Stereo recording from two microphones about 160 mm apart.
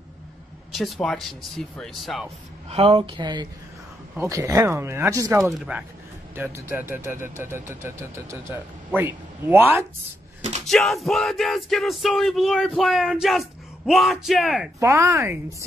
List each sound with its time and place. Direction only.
0.7 s yell: centre (ahead or behind)
2.7 s speech: 40° right (ahead or behind)
4.2 s speech: 20° right (ahead or behind)
5.4 s speech: 5° right (ahead or behind)
10.7 s yell: centre (ahead or behind)
14.8 s speech: 20° right (ahead or behind)